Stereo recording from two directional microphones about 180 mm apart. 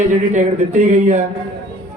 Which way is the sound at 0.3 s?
40° right (ahead or behind).